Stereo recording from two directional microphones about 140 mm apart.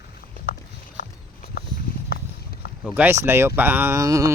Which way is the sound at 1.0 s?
90° left.